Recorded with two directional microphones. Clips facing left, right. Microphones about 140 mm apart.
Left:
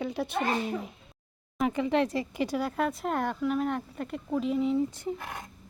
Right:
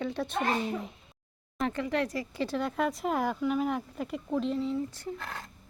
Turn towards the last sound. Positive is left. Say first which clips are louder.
# left 3 dB
turn(degrees=15)  # may be behind; listen again after turning